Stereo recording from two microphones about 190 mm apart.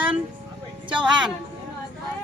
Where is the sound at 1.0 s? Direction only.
5° right (ahead or behind).